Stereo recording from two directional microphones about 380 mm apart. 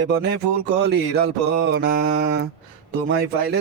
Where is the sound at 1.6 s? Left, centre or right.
Right.